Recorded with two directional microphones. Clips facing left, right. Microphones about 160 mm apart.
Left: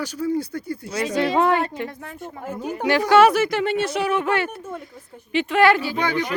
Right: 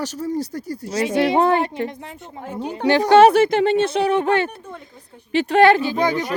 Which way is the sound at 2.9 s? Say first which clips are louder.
Right 3 dB; 30° right (ahead or behind).